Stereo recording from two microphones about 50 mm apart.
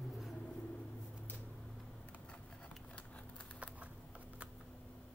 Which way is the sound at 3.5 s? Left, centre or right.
Right.